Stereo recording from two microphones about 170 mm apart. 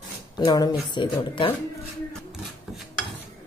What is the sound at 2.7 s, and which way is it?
Dishes, 5° right (ahead or behind).